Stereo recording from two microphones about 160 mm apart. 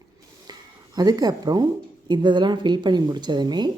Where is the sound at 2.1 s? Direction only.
30° right (ahead or behind).